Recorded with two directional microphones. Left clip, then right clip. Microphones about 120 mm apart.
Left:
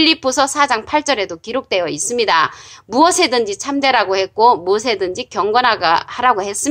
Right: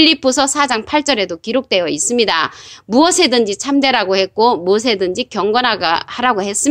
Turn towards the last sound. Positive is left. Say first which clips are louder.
# left 1 dB
turn(degrees=-30)  # may be behind; listen again after turning